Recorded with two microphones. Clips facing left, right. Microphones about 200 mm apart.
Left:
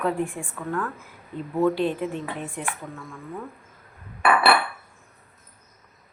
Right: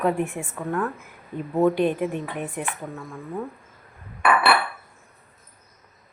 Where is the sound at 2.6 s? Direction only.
15° right (ahead or behind).